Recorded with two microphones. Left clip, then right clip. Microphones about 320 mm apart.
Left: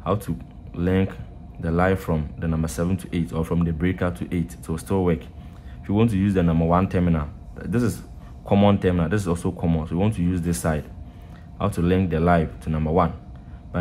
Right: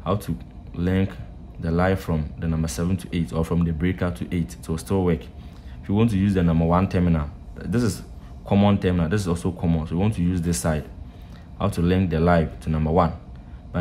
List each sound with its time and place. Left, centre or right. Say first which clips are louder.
0.0 s speech: left 1 dB; centre